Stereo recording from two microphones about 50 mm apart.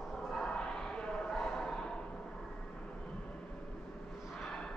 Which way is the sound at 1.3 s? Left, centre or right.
Centre.